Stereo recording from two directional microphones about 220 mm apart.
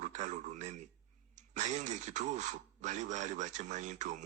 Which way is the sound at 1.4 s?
35° right (ahead or behind).